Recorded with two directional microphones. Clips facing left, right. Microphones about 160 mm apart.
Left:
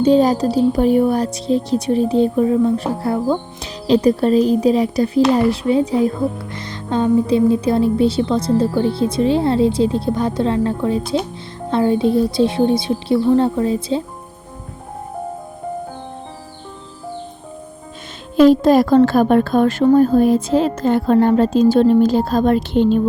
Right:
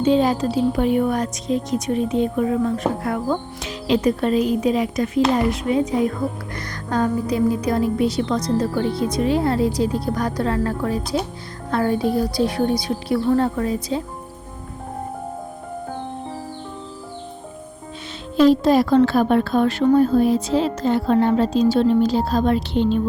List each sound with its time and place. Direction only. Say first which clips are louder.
0.0 s a woman's voice: left 4 dB; 40° left (ahead or behind)
18.3 s a woman's voice: left 4 dB; 50° left (ahead or behind)